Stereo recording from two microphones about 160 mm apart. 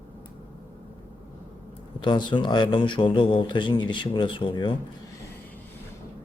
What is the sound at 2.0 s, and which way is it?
Speech, 30° left (ahead or behind).